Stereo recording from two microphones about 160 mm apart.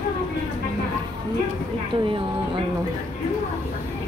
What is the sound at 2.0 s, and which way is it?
Speech, 30° right (ahead or behind).